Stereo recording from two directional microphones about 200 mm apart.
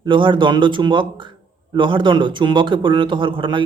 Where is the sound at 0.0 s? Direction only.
25° right (ahead or behind).